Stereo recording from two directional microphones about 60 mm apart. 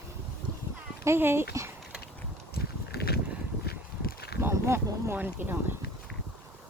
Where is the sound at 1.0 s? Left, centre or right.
Right.